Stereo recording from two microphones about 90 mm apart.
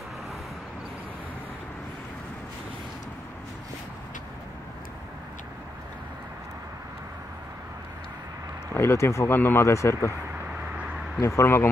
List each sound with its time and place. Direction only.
8.7 s speech: 30° left (ahead or behind)
11.1 s speech: 30° left (ahead or behind)